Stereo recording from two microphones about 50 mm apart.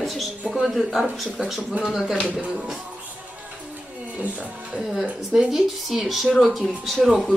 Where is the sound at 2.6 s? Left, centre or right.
Centre.